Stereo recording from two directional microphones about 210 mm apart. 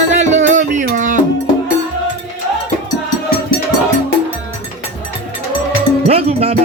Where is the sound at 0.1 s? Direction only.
35° right (ahead or behind).